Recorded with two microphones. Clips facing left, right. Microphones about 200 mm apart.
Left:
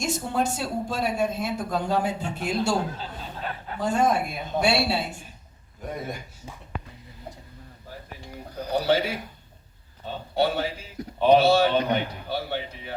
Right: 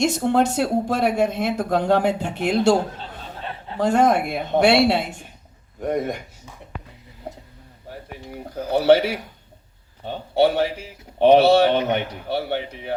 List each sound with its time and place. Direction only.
0.0 s speech: 70° right (ahead or behind)
3.4 s chuckle: 25° right (ahead or behind)
3.8 s speech: 75° right (ahead or behind)
8.9 s speech: 70° right (ahead or behind)